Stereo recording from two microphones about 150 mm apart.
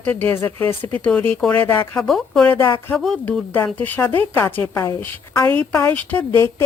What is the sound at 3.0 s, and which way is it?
A woman's voice, 5° left (ahead or behind).